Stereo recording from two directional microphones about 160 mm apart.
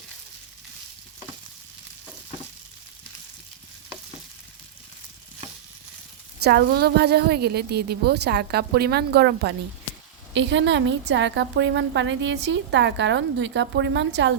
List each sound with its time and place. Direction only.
6.4 s a woman's voice: 90° right